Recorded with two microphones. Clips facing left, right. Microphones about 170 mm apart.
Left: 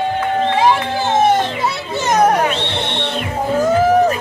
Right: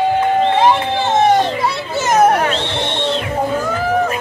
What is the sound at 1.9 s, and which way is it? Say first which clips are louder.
Children playing: right 2 dB; 5° right (ahead or behind).